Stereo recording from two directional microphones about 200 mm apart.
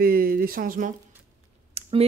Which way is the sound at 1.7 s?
30° right (ahead or behind).